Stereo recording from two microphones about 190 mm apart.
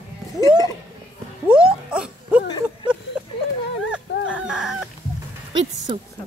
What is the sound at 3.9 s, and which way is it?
Chicken, 5° right (ahead or behind).